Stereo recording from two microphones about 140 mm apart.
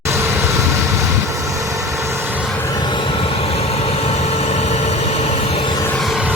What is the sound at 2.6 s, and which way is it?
Vehicle, 25° left (ahead or behind).